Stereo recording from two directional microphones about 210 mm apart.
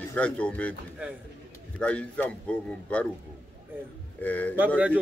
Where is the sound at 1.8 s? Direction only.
5° left (ahead or behind).